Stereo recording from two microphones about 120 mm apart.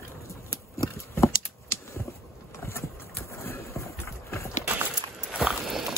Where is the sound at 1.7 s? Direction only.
25° left (ahead or behind).